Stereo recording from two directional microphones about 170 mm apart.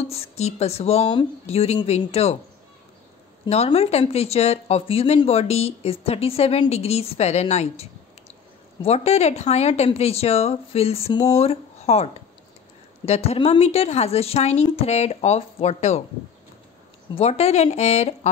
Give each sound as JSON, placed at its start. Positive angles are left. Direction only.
{"t": 0.1, "sound": "speech", "side_deg": 35}
{"t": 3.4, "sound": "speech", "side_deg": 40}
{"t": 17.1, "sound": "speech", "side_deg": 40}